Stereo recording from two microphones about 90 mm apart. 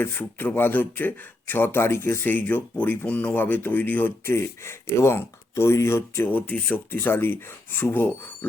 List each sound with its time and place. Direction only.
0.0 s speech: 20° left (ahead or behind)
4.4 s speech: 30° left (ahead or behind)